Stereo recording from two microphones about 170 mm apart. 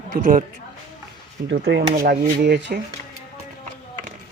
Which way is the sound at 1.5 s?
80° right.